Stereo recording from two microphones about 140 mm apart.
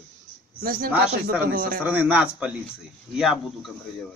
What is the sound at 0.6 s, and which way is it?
A man's voice, 90° right.